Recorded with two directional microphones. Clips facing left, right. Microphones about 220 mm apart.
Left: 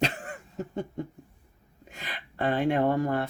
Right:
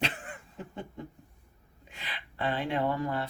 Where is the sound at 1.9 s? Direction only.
45° left (ahead or behind).